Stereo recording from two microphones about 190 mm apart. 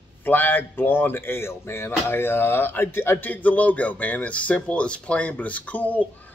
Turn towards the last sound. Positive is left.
turn(degrees=10)  # may be behind; listen again after turning